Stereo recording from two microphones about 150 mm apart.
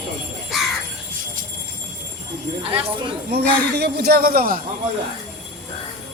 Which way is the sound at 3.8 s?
90° right.